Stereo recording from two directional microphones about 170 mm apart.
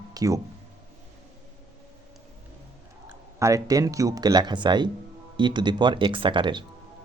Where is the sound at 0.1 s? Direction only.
20° right (ahead or behind).